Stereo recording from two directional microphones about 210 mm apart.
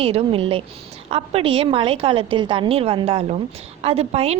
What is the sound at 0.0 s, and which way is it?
A woman's voice, 30° right (ahead or behind).